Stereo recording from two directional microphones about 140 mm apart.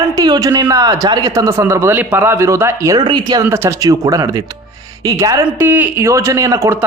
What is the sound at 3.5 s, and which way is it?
Speech, 20° right (ahead or behind).